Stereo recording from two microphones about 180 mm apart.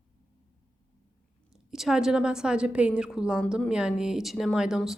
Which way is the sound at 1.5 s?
Centre (ahead or behind).